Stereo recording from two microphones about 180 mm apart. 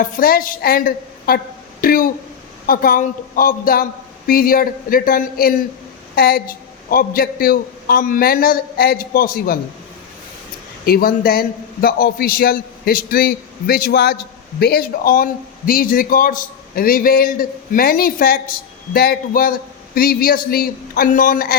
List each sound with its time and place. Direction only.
0.0 s a man's voice: 50° left (ahead or behind)
1.8 s a sound: 50° left (ahead or behind)
2.6 s a man's voice: 50° left (ahead or behind)
10.8 s a man's voice: 55° left (ahead or behind)